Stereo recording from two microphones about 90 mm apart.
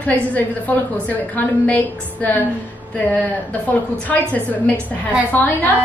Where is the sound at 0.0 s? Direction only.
15° left (ahead or behind).